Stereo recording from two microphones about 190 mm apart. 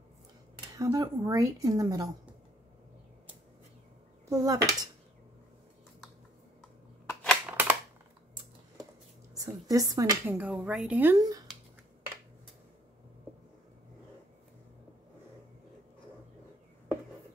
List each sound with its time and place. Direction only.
0.7 s a woman's voice: 20° right (ahead or behind)
4.3 s speech: 15° right (ahead or behind)
7.1 s scissors: centre (ahead or behind)
9.3 s speech: 20° right (ahead or behind)